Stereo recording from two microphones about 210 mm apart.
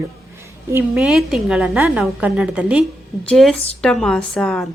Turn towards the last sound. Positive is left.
turn(degrees=5)  # may be behind; listen again after turning